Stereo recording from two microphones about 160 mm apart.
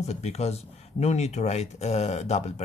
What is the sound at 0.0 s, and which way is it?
Speech, 40° left (ahead or behind).